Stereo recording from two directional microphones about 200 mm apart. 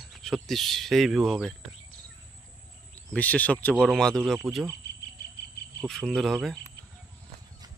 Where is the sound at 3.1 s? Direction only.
10° left (ahead or behind).